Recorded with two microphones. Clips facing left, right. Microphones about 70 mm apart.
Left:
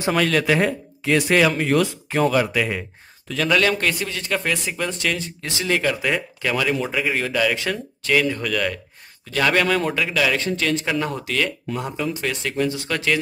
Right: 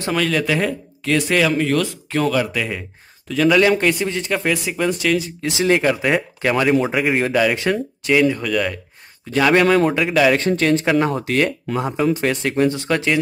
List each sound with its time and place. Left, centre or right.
0.1 s speech: centre
3.5 s speech: centre
4.3 s speech: centre
5.5 s speech: right; by 8.7 s centre
9.5 s speech: right
11.8 s speech: right